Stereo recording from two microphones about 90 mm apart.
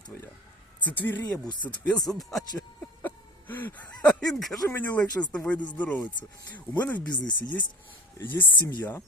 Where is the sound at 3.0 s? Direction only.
20° left (ahead or behind).